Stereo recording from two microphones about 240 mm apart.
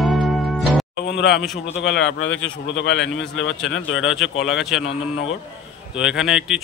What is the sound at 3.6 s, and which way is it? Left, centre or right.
A man's voice, centre.